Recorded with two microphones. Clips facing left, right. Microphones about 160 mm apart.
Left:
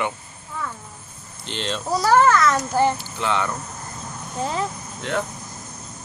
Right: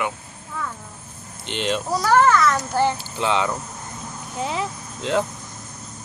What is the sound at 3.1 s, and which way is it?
Speech, 20° right (ahead or behind).